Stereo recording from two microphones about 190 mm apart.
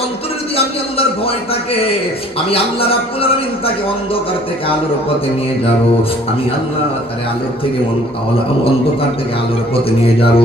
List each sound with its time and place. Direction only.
0.5 s a man's voice: 30° left (ahead or behind)
2.5 s a man's voice: 30° left (ahead or behind)
10.0 s a man's voice: 30° left (ahead or behind)